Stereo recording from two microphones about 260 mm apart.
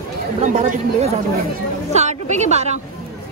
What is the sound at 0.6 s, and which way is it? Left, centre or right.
A woman's voice, right.